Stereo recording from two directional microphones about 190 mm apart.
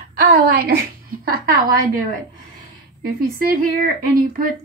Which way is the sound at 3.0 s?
50° right (ahead or behind).